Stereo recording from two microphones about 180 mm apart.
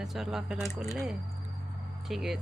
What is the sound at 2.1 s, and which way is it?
Speech, centre (ahead or behind).